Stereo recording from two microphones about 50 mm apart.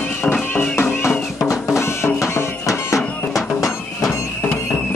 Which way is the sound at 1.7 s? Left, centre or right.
Left.